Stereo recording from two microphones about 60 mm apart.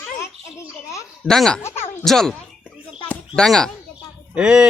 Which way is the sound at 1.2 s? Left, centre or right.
Centre.